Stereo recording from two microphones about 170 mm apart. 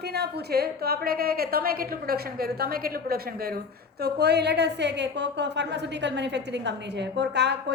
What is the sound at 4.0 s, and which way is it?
A woman's voice, 75° right (ahead or behind).